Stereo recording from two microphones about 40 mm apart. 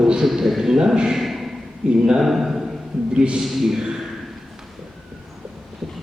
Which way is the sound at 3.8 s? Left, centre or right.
Centre.